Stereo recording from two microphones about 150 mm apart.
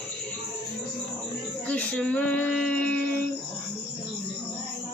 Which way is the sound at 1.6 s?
10° left (ahead or behind).